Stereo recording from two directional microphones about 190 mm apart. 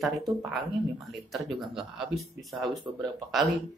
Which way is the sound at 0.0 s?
Centre (ahead or behind).